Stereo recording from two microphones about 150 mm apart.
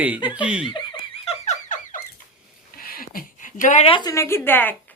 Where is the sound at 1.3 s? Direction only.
55° left (ahead or behind).